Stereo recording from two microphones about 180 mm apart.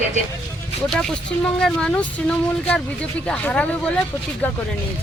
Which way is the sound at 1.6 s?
5° left (ahead or behind).